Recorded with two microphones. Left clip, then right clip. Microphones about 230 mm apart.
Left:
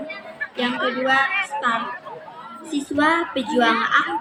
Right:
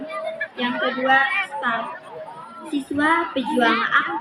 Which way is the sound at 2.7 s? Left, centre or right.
Left.